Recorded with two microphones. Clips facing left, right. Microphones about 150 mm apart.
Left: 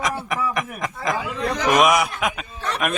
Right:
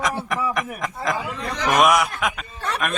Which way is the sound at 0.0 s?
Centre (ahead or behind).